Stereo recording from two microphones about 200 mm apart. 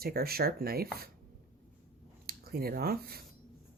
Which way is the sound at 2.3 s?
50° right (ahead or behind).